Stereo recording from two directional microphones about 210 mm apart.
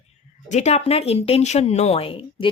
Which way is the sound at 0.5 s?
30° left (ahead or behind).